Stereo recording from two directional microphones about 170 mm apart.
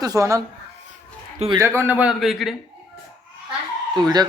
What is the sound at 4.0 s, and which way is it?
Speech, 25° right (ahead or behind).